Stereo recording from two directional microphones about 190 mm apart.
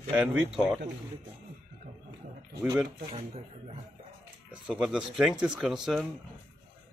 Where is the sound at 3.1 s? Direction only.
30° right (ahead or behind).